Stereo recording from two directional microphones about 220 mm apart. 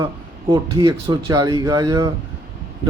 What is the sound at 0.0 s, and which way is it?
Speech, 20° right (ahead or behind).